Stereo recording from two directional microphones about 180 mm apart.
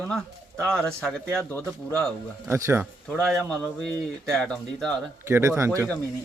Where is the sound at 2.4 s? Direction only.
15° right (ahead or behind).